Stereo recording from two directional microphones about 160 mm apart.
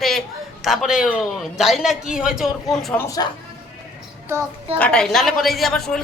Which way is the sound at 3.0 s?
20° left (ahead or behind).